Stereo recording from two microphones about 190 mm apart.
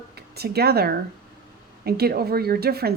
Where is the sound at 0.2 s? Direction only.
55° right (ahead or behind).